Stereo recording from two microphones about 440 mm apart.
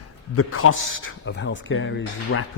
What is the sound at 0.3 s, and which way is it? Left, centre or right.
A man's voice, left.